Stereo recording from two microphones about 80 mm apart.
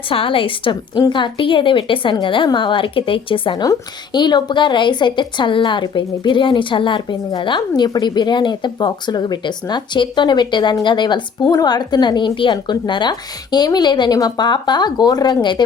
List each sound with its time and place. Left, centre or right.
0.3 s a woman's voice: left
4.1 s a woman's voice: left
7.8 s a woman's voice: left
11.5 s a woman's voice: left